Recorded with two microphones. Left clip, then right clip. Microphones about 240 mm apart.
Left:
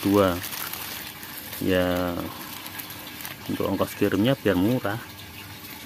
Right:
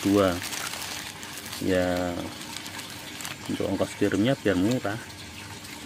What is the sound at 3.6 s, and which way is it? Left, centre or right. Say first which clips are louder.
Speech: left 2 dB; centre.